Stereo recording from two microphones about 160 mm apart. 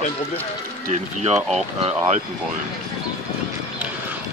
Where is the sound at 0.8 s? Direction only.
45° right (ahead or behind).